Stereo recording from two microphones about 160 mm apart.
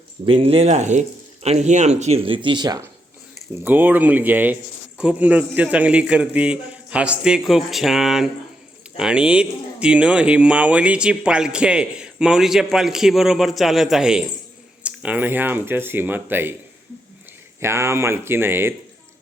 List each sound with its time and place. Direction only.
0.3 s speech: 35° right (ahead or behind)
3.5 s a man's voice: 10° right (ahead or behind)
17.6 s a man's voice: 15° right (ahead or behind)